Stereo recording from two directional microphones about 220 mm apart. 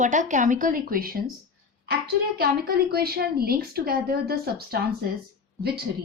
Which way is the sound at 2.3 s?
45° right (ahead or behind).